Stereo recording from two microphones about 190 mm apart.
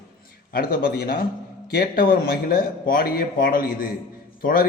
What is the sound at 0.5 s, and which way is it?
Speech, 50° left (ahead or behind).